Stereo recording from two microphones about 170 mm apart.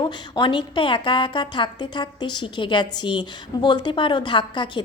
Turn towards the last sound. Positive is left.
turn(degrees=25)  # may be behind; listen again after turning